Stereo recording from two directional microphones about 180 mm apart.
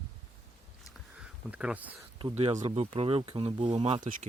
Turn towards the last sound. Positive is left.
turn(degrees=-30)  # may be behind; listen again after turning